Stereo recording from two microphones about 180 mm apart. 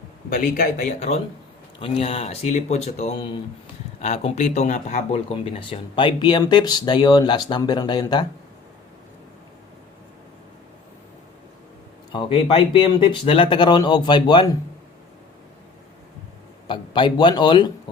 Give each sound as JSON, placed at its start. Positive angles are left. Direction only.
{"t": 0.3, "sound": "speech", "side_deg": 45}
{"t": 12.1, "sound": "speech", "side_deg": 30}
{"t": 16.6, "sound": "a man's voice", "side_deg": 25}